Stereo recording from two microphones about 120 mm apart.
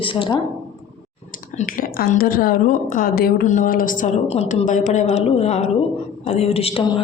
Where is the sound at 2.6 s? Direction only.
90° left.